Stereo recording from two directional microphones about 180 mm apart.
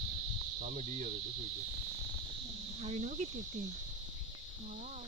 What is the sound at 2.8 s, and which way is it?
Speech, 40° right (ahead or behind).